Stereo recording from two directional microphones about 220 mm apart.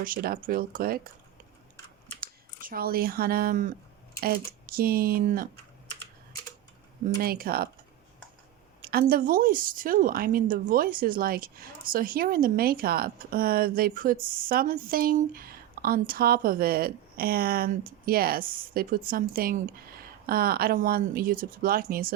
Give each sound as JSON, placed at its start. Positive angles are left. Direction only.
{"t": 0.0, "sound": "a woman's voice", "side_deg": -40}
{"t": 2.2, "sound": "a woman's voice", "side_deg": -40}
{"t": 7.2, "sound": "speech", "side_deg": -45}
{"t": 8.8, "sound": "a woman's voice", "side_deg": -45}